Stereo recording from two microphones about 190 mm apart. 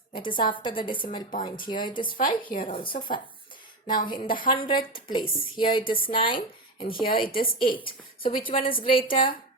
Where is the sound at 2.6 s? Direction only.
30° left (ahead or behind).